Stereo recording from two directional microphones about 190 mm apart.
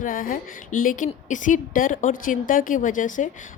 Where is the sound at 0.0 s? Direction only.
45° left (ahead or behind).